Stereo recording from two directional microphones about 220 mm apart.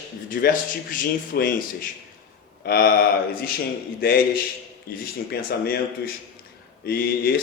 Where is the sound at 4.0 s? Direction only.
45° left (ahead or behind).